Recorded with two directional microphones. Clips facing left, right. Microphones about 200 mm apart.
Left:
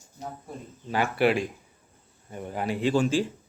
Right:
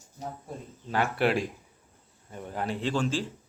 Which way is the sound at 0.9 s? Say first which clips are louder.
Left 2 dB; 5° left (ahead or behind).